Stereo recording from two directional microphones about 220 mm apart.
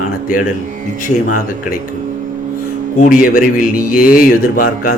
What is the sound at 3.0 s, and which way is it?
Speech, 40° left (ahead or behind).